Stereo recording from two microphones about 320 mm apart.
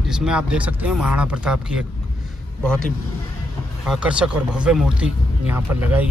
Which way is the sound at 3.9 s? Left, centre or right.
Centre.